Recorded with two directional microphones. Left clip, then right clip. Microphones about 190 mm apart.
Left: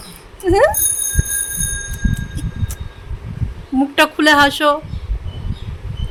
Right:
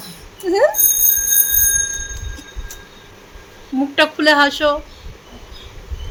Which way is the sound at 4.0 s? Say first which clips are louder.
Left 1 dB; 15° left (ahead or behind).